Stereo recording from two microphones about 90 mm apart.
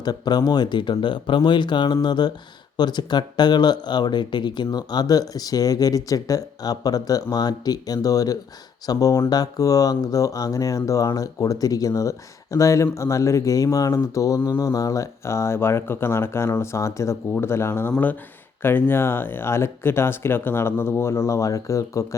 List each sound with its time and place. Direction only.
0.0 s speech: 50° left (ahead or behind)